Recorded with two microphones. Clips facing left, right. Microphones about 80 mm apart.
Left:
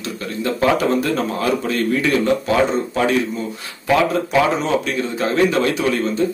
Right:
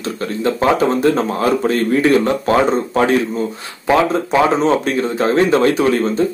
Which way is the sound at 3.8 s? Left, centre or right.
Right.